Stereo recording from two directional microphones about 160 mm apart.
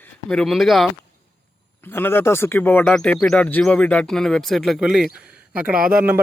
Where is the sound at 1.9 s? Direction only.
15° left (ahead or behind).